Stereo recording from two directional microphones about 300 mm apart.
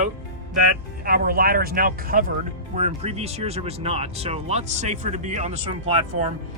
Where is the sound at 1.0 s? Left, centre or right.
Right.